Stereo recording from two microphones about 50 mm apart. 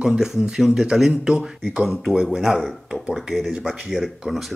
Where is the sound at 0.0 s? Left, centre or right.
Centre.